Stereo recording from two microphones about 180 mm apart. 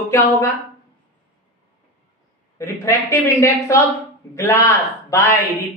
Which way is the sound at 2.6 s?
15° left (ahead or behind).